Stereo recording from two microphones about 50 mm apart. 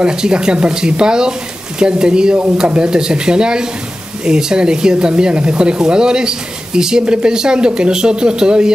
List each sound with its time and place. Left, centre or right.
0.0 s speech: centre